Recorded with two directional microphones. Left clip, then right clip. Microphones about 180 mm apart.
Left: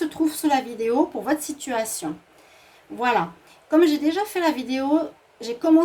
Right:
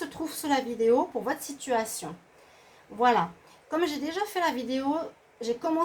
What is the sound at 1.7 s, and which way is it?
A woman's voice, 50° left (ahead or behind).